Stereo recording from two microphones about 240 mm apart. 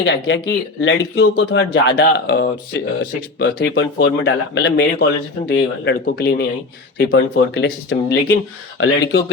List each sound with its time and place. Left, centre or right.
0.0 s speech: left